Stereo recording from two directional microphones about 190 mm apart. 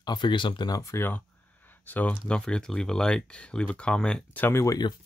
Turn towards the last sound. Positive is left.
turn(degrees=20)  # may be behind; listen again after turning